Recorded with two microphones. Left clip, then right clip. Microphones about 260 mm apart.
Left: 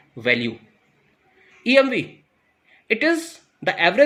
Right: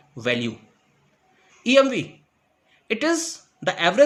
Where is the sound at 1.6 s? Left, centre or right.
Centre.